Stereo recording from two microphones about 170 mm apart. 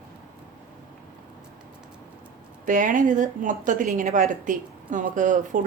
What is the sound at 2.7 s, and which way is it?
A woman's voice, 50° right (ahead or behind).